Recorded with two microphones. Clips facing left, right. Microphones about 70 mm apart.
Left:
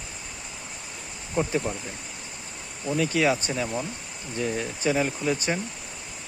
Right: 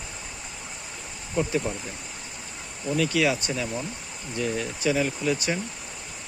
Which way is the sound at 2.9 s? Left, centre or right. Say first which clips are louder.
Even; left.